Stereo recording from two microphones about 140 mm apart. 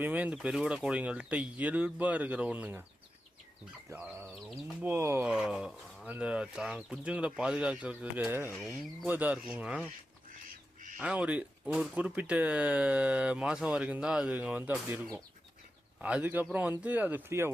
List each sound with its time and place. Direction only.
0.0 s speech: 10° right (ahead or behind)
3.8 s speech: 10° right (ahead or behind)
5.3 s speech: 5° right (ahead or behind)
8.5 s speech: centre (ahead or behind)
9.0 s speech: 10° right (ahead or behind)
11.0 s speech: 10° right (ahead or behind)